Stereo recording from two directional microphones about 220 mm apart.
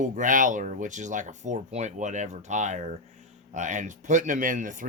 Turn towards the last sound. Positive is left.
turn(degrees=-35)  # may be behind; listen again after turning